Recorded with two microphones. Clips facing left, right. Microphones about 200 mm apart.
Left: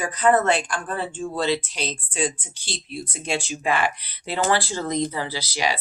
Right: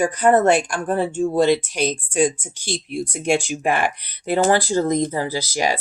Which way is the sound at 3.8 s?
50° right (ahead or behind).